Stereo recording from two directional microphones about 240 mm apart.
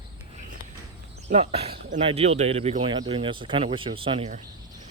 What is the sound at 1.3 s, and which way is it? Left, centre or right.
Speech, right.